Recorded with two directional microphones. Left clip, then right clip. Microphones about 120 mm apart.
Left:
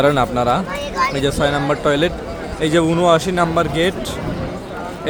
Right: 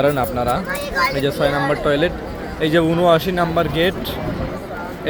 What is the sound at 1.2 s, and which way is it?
A man's voice, 30° left (ahead or behind).